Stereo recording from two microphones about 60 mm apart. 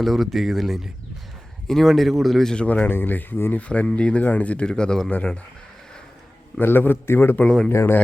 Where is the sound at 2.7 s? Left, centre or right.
Left.